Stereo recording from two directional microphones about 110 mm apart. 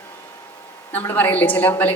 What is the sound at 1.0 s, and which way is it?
Speech, 20° left (ahead or behind).